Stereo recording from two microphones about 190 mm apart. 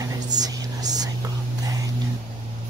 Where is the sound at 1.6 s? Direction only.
20° right (ahead or behind).